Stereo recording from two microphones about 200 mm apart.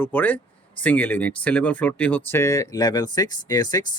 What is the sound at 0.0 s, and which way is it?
Speech, 10° left (ahead or behind).